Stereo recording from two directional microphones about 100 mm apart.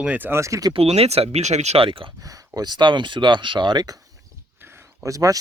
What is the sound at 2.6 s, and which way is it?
Speech, 45° right (ahead or behind).